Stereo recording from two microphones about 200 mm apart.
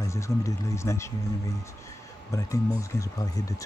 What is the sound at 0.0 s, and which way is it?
Speech, 15° left (ahead or behind).